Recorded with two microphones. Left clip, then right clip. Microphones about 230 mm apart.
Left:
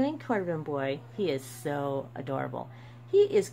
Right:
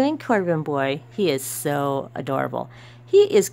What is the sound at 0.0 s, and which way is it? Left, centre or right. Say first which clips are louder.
Speech: right 9 dB; right.